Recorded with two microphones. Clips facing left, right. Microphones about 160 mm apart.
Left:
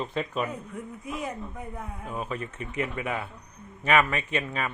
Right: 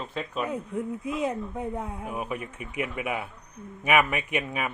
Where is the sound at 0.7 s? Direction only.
25° right (ahead or behind).